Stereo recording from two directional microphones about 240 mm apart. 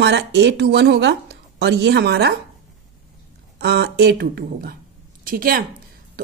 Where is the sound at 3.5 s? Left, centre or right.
Right.